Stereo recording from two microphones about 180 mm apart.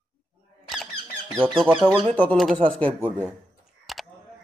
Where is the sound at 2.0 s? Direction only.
10° left (ahead or behind).